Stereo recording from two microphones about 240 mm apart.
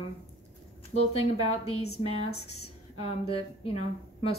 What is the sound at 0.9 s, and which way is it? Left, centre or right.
Speech, left.